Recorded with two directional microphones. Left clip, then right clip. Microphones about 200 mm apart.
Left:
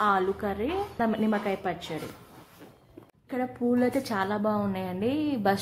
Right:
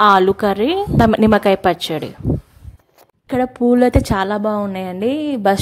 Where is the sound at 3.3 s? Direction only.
45° right (ahead or behind).